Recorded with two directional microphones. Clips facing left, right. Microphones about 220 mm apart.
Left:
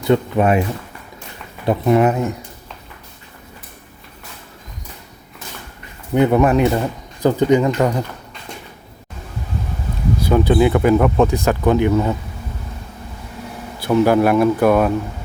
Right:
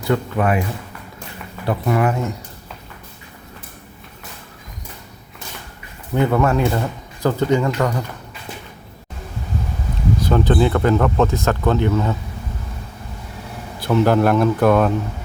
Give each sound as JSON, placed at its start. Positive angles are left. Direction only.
{"t": 0.1, "sound": "speech", "side_deg": 25}
{"t": 1.6, "sound": "speech", "side_deg": 20}
{"t": 6.1, "sound": "speech", "side_deg": 20}
{"t": 10.2, "sound": "speech", "side_deg": 10}
{"t": 13.8, "sound": "speech", "side_deg": 5}